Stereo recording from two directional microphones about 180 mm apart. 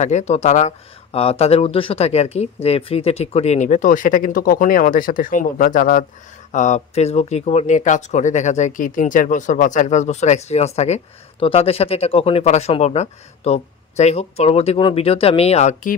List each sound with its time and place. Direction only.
0.0 s speech: 40° left (ahead or behind)